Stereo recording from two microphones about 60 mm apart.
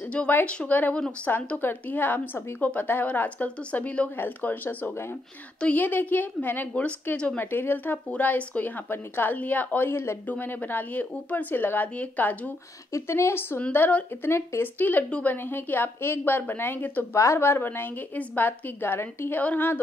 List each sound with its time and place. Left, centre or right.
0.5 s a woman's voice: left
7.3 s a woman's voice: left
12.9 s speech: left
13.6 s a woman's voice: left
14.3 s speech: left
14.8 s a woman's voice: left
15.5 s a woman's voice: left
17.1 s a woman's voice: left